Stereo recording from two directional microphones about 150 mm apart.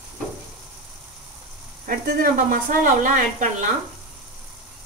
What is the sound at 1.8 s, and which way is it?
Speech, 60° right (ahead or behind).